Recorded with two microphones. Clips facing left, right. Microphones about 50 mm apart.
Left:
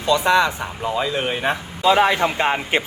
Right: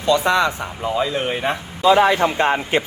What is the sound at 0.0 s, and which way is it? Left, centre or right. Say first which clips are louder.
Speech: even; centre.